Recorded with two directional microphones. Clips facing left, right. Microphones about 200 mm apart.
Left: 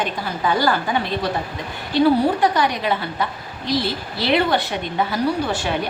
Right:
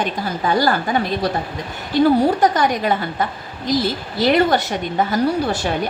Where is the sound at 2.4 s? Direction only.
45° right (ahead or behind).